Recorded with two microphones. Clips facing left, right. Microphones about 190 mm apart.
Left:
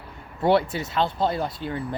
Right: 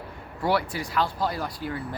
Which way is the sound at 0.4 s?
25° left (ahead or behind).